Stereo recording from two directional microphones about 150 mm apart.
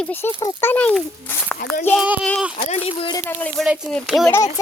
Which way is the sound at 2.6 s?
45° left (ahead or behind).